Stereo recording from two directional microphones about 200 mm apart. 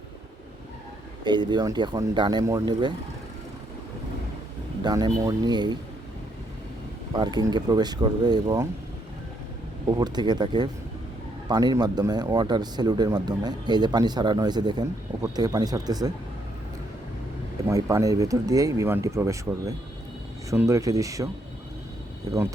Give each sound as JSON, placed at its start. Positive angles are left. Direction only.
{"t": 1.2, "sound": "speech", "side_deg": -20}
{"t": 4.8, "sound": "speech", "side_deg": -20}
{"t": 7.1, "sound": "speech", "side_deg": -20}
{"t": 10.0, "sound": "speech", "side_deg": -20}
{"t": 17.7, "sound": "speech", "side_deg": -15}